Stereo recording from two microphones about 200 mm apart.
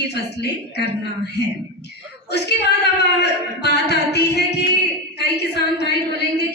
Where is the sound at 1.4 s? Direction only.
60° left (ahead or behind).